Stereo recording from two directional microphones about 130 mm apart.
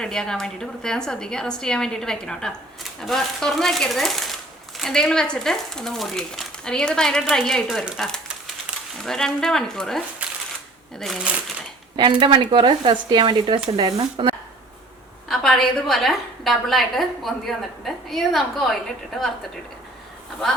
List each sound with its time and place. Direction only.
0.0 s a woman's voice: 5° left (ahead or behind)
11.0 s a woman's voice: 5° right (ahead or behind)
11.9 s speech: 40° right (ahead or behind)
15.3 s a woman's voice: 5° left (ahead or behind)